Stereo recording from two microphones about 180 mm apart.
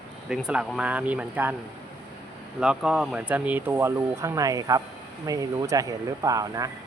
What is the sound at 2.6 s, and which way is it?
Speech, 5° right (ahead or behind).